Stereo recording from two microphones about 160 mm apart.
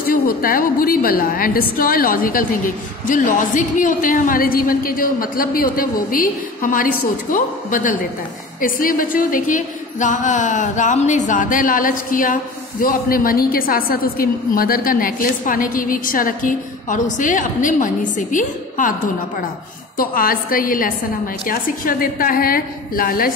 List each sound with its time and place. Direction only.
0.0 s a woman's voice: 65° left (ahead or behind)
20.0 s a woman's voice: 65° left (ahead or behind)